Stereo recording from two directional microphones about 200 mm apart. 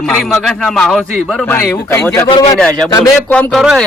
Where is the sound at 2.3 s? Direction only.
25° left (ahead or behind).